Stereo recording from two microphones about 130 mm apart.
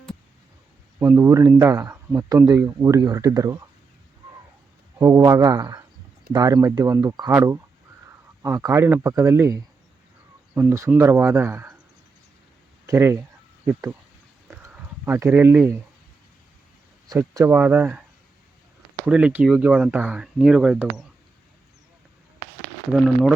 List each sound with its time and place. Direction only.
0.9 s speech: 15° right (ahead or behind)
4.9 s speech: 25° right (ahead or behind)
12.8 s speech: 20° right (ahead or behind)
14.7 s speech: 15° right (ahead or behind)
17.1 s speech: 25° right (ahead or behind)
17.4 s speech: 15° right (ahead or behind)
19.0 s speech: 10° right (ahead or behind)
22.9 s speech: 5° right (ahead or behind)